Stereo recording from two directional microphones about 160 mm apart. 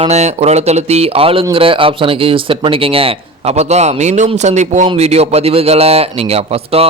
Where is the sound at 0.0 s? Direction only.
45° right (ahead or behind).